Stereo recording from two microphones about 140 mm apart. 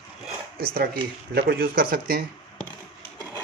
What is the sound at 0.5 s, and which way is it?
Speech, 90° right.